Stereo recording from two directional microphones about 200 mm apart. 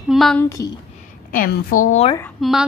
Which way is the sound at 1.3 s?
45° left (ahead or behind).